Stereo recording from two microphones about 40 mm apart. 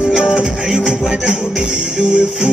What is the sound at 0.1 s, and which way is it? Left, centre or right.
Music, right.